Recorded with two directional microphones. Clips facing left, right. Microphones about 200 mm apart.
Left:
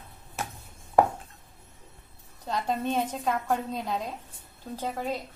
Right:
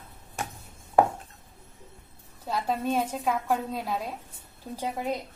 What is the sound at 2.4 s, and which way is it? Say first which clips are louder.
A woman's voice: even; 5° right (ahead or behind).